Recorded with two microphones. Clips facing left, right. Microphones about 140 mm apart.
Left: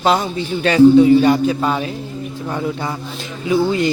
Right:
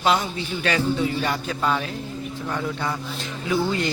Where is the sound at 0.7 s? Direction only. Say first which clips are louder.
Left 15 dB; 25° left (ahead or behind).